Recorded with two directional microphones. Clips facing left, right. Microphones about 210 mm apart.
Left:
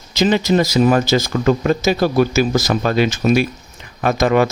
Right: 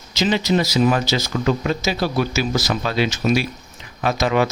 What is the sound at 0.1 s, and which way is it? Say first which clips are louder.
Speech: left 4 dB; 50° left (ahead or behind).